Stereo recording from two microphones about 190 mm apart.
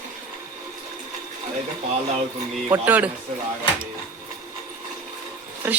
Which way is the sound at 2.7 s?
10° right (ahead or behind).